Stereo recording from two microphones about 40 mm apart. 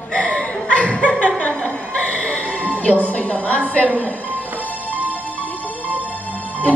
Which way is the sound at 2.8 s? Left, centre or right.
Left.